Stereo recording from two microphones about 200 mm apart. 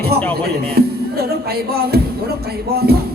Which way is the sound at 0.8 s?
50° right (ahead or behind).